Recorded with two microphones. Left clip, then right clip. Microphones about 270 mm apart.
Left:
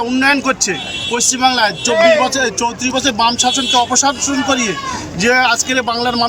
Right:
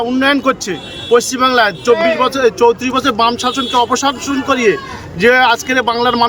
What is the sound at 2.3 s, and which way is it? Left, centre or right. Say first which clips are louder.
A man's voice: right 6 dB; centre.